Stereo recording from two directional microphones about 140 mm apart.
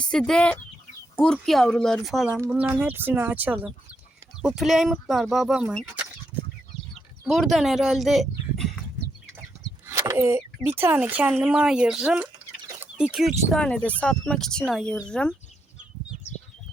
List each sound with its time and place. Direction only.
0.0 s speech: 5° left (ahead or behind)
2.7 s speech: 15° right (ahead or behind)
7.3 s speech: centre (ahead or behind)
9.9 s speech: 20° right (ahead or behind); by 15.4 s 5° left (ahead or behind)